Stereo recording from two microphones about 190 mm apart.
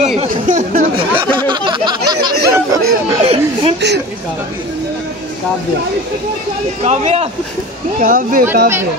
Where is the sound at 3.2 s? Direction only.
30° right (ahead or behind).